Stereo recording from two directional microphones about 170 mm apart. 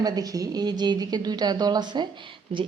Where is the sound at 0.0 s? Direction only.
20° right (ahead or behind).